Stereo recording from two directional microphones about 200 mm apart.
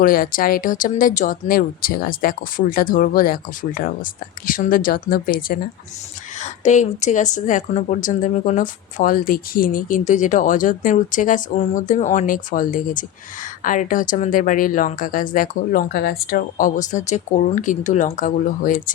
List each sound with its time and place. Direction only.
0.0 s speech: 45° left (ahead or behind)